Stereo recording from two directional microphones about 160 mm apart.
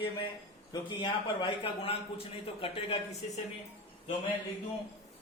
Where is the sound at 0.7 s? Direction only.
30° left (ahead or behind).